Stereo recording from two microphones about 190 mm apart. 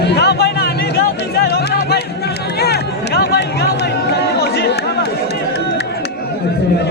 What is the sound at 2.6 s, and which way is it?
Run, 60° left (ahead or behind).